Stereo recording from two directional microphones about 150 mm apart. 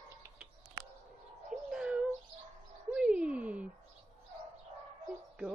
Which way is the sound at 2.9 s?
5° right (ahead or behind).